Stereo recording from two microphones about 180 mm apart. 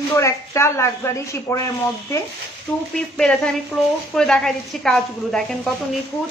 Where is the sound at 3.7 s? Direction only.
10° left (ahead or behind).